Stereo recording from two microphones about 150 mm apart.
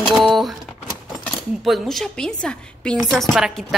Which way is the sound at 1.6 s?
Centre (ahead or behind).